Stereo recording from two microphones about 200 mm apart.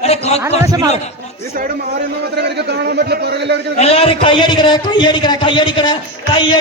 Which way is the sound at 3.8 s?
30° left (ahead or behind).